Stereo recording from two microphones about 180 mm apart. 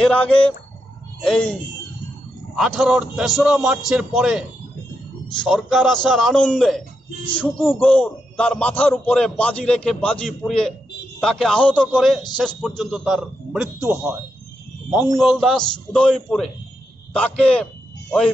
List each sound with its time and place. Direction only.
0.0 s a man's voice: 5° left (ahead or behind)
13.7 s speech: 15° right (ahead or behind)
15.1 s a man's voice: centre (ahead or behind)